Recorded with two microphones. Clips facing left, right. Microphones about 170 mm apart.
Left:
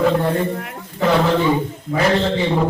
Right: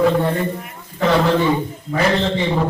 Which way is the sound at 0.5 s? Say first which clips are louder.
Left 4 dB; 90° left.